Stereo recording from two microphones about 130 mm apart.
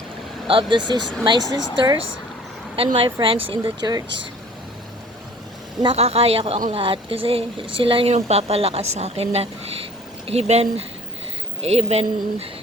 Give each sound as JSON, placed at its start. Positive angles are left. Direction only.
{"t": 0.4, "sound": "speech", "side_deg": -40}
{"t": 2.7, "sound": "speech", "side_deg": -45}
{"t": 5.8, "sound": "speech", "side_deg": -45}